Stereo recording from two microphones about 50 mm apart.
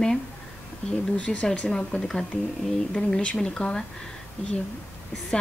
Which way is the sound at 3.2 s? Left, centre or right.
Centre.